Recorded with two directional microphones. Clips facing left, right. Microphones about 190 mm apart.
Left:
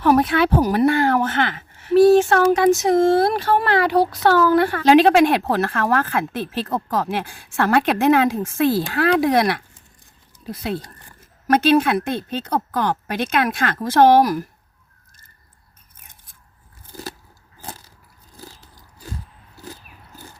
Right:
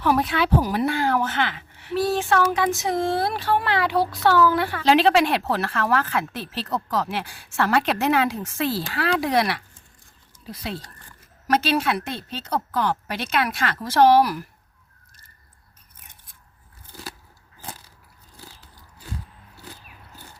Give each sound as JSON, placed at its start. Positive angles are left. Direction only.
{"t": 0.0, "sound": "a woman's voice", "side_deg": 50}
{"t": 18.3, "sound": "biting", "side_deg": 45}